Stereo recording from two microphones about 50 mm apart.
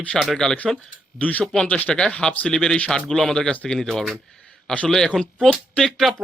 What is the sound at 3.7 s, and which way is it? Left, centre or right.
Speech, centre.